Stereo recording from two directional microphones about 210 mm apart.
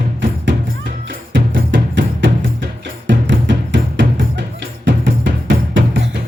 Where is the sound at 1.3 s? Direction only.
60° right (ahead or behind).